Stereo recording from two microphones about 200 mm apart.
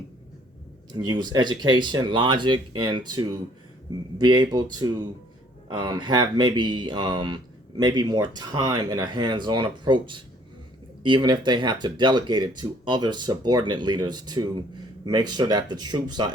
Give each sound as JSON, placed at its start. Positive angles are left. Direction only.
{"t": 1.0, "sound": "speech", "side_deg": -20}